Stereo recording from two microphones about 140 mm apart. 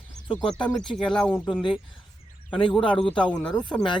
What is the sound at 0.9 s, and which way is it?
Speech, 5° left (ahead or behind).